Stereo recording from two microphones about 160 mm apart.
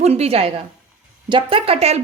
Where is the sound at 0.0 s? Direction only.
40° right (ahead or behind).